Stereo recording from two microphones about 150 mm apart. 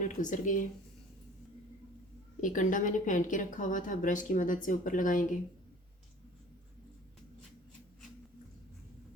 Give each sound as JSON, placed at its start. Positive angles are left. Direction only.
{"t": 0.0, "sound": "speech", "side_deg": 55}
{"t": 2.4, "sound": "a woman's voice", "side_deg": 60}